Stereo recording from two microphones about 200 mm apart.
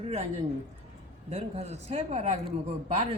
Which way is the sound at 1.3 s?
30° right (ahead or behind).